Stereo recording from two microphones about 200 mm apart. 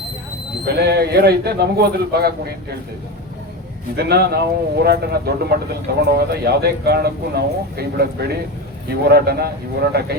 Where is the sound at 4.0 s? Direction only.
55° right (ahead or behind).